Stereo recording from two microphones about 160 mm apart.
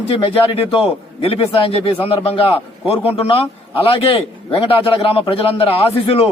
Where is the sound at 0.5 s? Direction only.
35° left (ahead or behind).